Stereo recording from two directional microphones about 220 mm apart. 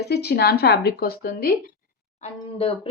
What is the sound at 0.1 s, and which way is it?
Speech, 45° left (ahead or behind).